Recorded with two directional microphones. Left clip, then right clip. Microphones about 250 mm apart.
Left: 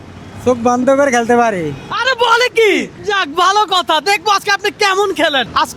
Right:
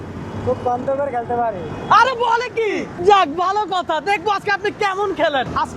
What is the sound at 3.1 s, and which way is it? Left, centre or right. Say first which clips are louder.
Speech: right 4 dB; left.